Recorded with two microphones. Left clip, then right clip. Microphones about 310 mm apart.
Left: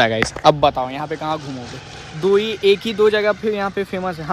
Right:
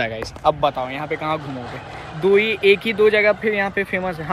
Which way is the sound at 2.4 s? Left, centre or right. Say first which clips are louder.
Right 1 dB; centre.